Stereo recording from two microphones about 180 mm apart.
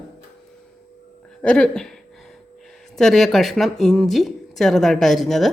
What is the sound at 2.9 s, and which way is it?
A woman's voice, centre (ahead or behind).